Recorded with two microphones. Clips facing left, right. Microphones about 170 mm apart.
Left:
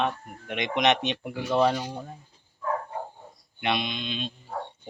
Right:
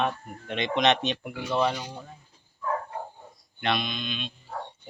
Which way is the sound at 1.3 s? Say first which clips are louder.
Left 4 dB; 40° left (ahead or behind).